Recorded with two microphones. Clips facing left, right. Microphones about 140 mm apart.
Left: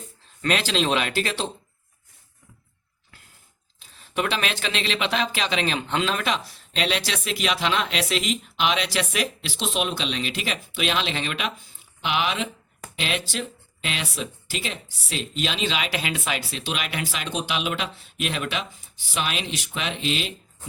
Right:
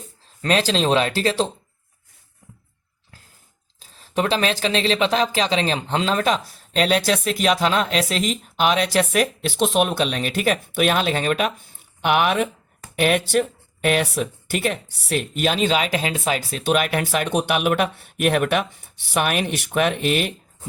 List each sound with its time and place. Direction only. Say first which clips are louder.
0.4 s speech: right 4 dB; 35° right (ahead or behind)
3.8 s speech: right 4 dB; 35° right (ahead or behind); by 20.3 s 55° right (ahead or behind)